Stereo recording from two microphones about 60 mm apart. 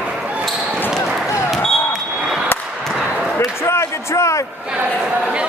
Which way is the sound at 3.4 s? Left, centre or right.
Left.